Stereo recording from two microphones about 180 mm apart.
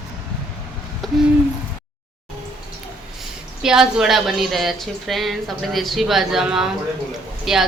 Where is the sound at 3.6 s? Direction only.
5° right (ahead or behind).